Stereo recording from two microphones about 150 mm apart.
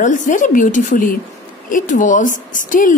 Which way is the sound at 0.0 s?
60° left (ahead or behind).